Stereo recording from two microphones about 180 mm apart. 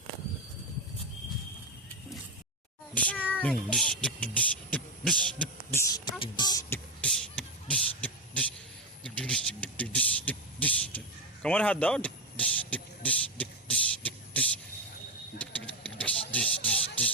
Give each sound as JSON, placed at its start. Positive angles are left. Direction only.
{"t": 2.9, "sound": "a sound", "side_deg": 10}
{"t": 3.3, "sound": "speech", "side_deg": 5}
{"t": 5.8, "sound": "music", "side_deg": 25}
{"t": 7.0, "sound": "beatboxing", "side_deg": 5}
{"t": 9.0, "sound": "a sound", "side_deg": 5}
{"t": 11.4, "sound": "vehicle", "side_deg": 5}